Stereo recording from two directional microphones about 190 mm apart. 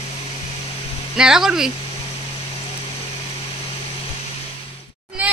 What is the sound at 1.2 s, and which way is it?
Speech, centre (ahead or behind).